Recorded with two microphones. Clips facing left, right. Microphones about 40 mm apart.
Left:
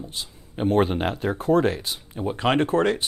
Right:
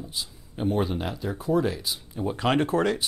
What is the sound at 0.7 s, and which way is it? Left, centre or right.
Speech, left.